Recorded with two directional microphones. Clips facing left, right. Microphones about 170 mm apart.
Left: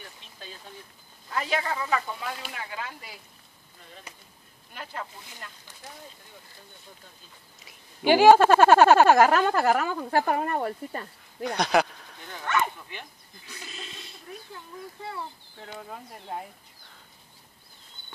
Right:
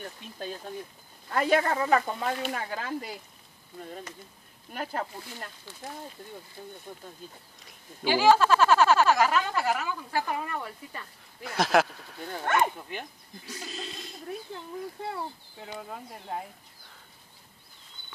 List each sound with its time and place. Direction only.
0.0 s speech: 50° right (ahead or behind)
4.7 s speech: 40° right (ahead or behind)
6.9 s speech: 55° right (ahead or behind)
8.0 s speech: 60° left (ahead or behind)
11.4 s speech: 5° right (ahead or behind)
12.3 s speech: 45° right (ahead or behind)
13.5 s goat: 40° right (ahead or behind)
15.5 s speech: 5° right (ahead or behind)